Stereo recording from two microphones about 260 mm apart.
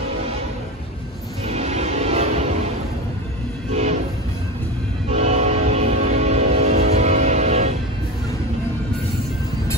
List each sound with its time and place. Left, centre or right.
1.5 s music: right
5.1 s train: right